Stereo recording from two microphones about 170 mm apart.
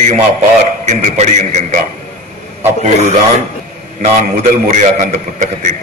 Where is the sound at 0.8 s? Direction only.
45° right (ahead or behind).